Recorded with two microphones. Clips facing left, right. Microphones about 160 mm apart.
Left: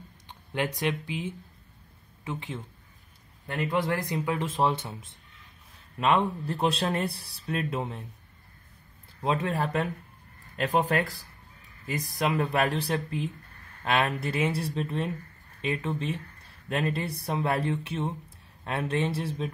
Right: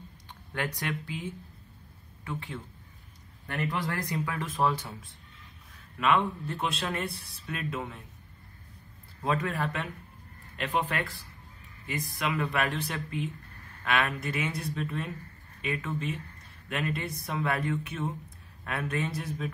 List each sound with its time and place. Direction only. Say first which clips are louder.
0.5 s speech: left 5 dB; 20° left (ahead or behind)
9.2 s speech: left 2 dB; 25° left (ahead or behind)